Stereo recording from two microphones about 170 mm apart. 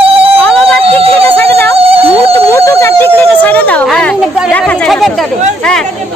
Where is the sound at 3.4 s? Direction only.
10° left (ahead or behind).